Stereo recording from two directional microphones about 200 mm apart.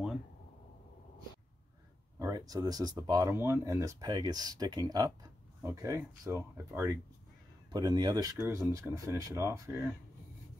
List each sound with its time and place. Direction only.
2.1 s speech: 15° right (ahead or behind)